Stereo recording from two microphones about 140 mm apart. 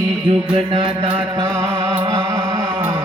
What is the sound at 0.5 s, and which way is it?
Music, 35° right (ahead or behind).